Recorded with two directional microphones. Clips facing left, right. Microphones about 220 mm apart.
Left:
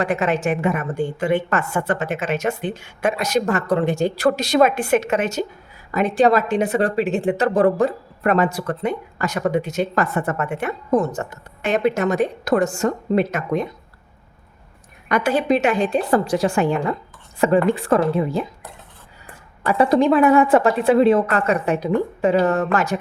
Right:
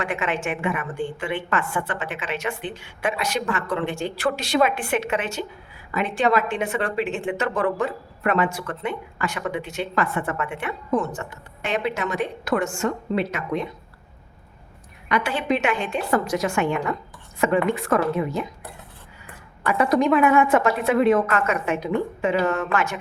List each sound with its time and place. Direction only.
0.0 s a woman's voice: 40° left (ahead or behind)
15.1 s speech: 40° left (ahead or behind)
19.6 s speech: 30° left (ahead or behind)